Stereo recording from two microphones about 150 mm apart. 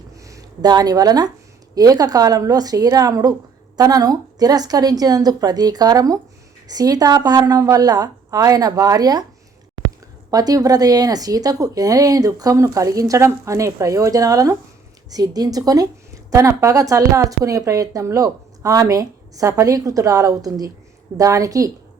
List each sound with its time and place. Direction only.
0.2 s a woman's voice: 20° right (ahead or behind)
10.3 s a woman's voice: 25° right (ahead or behind)